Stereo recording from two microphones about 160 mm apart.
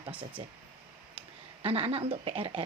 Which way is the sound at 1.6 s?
35° right (ahead or behind).